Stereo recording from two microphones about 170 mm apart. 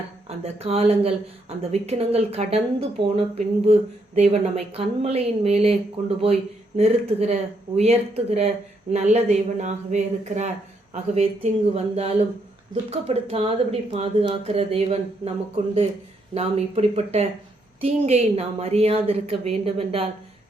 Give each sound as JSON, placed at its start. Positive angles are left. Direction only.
{"t": 0.3, "sound": "speech", "side_deg": -35}
{"t": 6.7, "sound": "speech", "side_deg": -40}